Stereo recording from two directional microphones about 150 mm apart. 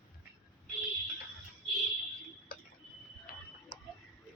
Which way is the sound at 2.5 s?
90° left.